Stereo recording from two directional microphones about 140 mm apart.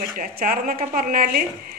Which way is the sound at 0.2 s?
90° right.